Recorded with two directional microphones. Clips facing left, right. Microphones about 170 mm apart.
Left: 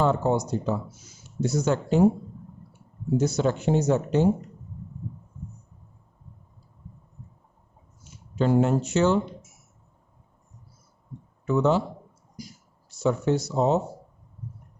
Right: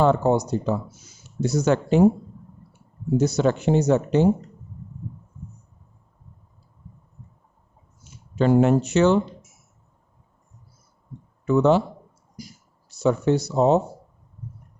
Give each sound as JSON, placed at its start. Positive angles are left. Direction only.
{"t": 0.0, "sound": "speech", "side_deg": -70}
{"t": 3.2, "sound": "speech", "side_deg": -70}
{"t": 8.4, "sound": "speech", "side_deg": -75}
{"t": 11.4, "sound": "speech", "side_deg": -70}
{"t": 12.9, "sound": "speech", "side_deg": -70}